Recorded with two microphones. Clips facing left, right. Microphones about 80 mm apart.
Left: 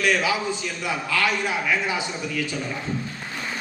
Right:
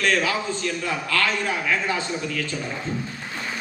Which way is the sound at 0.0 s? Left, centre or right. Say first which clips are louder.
Even; centre.